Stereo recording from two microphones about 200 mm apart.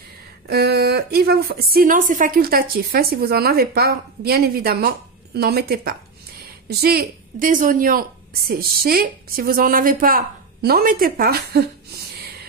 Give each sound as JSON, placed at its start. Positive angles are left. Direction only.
{"t": 0.5, "sound": "a woman's voice", "side_deg": -55}